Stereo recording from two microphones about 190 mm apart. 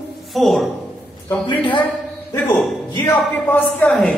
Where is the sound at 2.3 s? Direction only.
10° left (ahead or behind).